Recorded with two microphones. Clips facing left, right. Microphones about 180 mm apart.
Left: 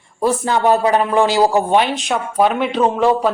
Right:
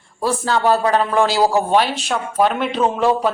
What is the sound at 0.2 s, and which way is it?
Speech, 20° left (ahead or behind).